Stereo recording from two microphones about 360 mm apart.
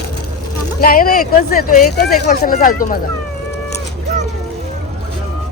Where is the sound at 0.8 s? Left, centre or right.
Left.